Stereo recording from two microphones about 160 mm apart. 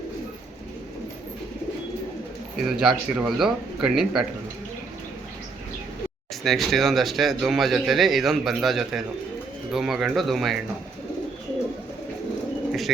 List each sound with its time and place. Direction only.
2.6 s speech: centre (ahead or behind)
6.4 s speech: centre (ahead or behind)